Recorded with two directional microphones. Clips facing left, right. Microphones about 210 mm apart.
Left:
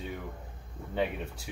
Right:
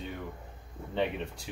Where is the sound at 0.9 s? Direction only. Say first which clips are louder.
Even; 5° left (ahead or behind).